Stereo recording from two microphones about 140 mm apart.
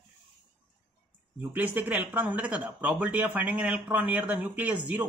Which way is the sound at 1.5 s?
10° right (ahead or behind).